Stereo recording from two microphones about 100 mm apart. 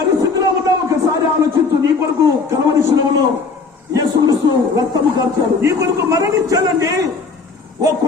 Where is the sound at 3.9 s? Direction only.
40° right (ahead or behind).